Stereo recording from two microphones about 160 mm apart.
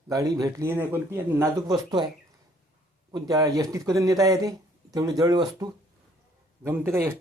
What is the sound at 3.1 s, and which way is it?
A man's voice, 20° right (ahead or behind).